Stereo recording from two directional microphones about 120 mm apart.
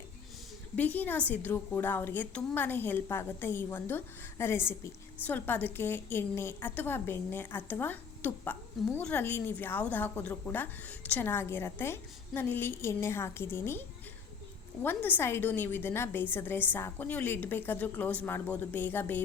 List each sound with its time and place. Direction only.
0.8 s a woman's voice: 15° left (ahead or behind)
14.8 s a woman's voice: 15° left (ahead or behind)